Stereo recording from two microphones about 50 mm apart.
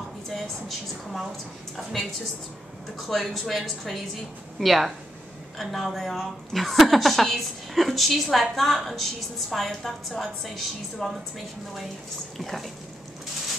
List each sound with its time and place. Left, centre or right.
0.3 s a woman's voice: centre